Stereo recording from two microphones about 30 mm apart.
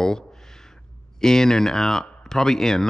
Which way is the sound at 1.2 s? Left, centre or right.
Centre.